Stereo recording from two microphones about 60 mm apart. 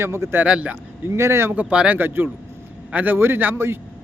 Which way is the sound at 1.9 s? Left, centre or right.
Right.